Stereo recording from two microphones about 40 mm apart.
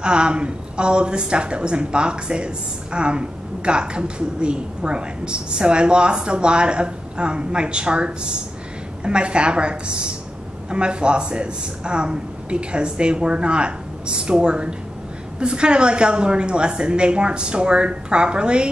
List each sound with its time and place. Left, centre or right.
0.0 s a woman's voice: right